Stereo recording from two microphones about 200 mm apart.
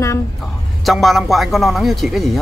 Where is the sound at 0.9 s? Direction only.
Centre (ahead or behind).